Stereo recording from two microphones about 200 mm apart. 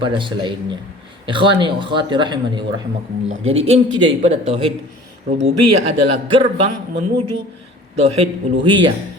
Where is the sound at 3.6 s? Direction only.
30° right (ahead or behind).